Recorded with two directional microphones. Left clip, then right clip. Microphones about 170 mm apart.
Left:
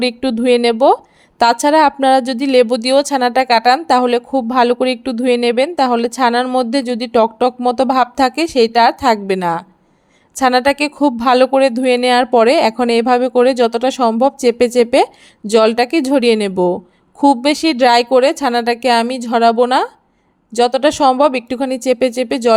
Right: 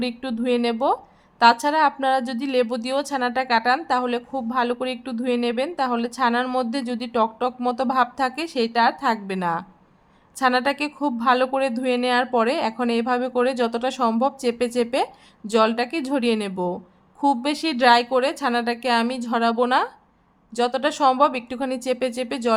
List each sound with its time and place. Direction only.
0.0 s speech: 35° left (ahead or behind)